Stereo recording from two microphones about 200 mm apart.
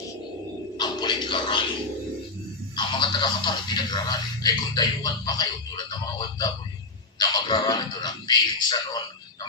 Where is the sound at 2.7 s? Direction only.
25° left (ahead or behind).